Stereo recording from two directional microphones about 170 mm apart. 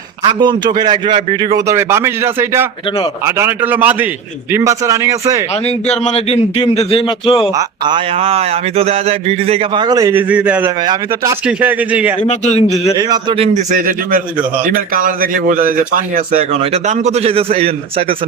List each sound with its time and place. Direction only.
0.3 s speech: 25° right (ahead or behind)
1.5 s speech: 15° right (ahead or behind)
5.6 s speech: 40° left (ahead or behind)
7.5 s speech: 25° right (ahead or behind); by 10.7 s 10° right (ahead or behind)
10.8 s speech: 20° right (ahead or behind)
11.4 s speech: 10° right (ahead or behind)
12.3 s speech: 40° left (ahead or behind)
13.0 s speech: 25° right (ahead or behind)
13.7 s a man's voice: 55° right (ahead or behind); by 18.0 s 35° right (ahead or behind)